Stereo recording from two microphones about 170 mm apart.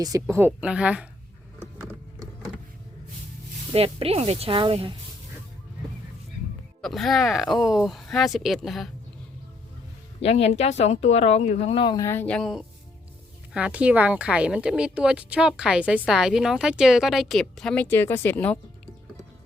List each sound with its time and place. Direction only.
0.0 s a woman's voice: 20° right (ahead or behind)
1.8 s a sound: 20° right (ahead or behind)
3.7 s speech: 30° right (ahead or behind)
6.8 s a woman's voice: centre (ahead or behind)
10.2 s a woman's voice: 35° left (ahead or behind); by 18.6 s 10° left (ahead or behind)